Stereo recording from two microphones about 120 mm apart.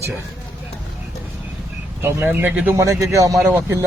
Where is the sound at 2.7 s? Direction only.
25° right (ahead or behind).